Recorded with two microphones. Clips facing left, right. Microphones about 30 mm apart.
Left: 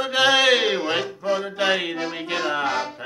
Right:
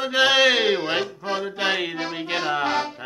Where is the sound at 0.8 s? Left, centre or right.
Right.